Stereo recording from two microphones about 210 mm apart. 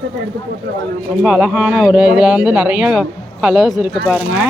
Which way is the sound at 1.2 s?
5° right (ahead or behind).